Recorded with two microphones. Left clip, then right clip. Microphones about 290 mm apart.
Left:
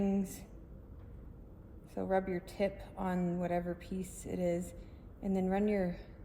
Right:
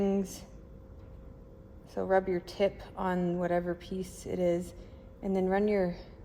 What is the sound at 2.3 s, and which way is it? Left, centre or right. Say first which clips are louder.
A woman's voice: right 6 dB; right.